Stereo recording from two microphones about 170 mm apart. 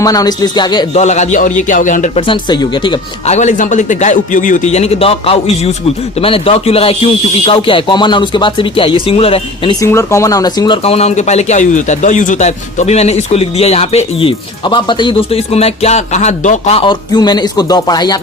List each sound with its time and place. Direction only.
0.0 s speech: 20° left (ahead or behind)
0.9 s a man's voice: 45° left (ahead or behind)
2.1 s speech: 30° left (ahead or behind)
3.2 s a man's voice: 45° left (ahead or behind)
9.8 s speech: 15° left (ahead or behind)
10.8 s a man's voice: 35° left (ahead or behind)